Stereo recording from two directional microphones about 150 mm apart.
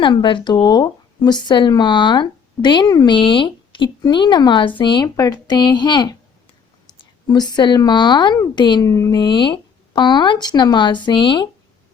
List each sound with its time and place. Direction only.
0.0 s a woman's voice: 30° left (ahead or behind)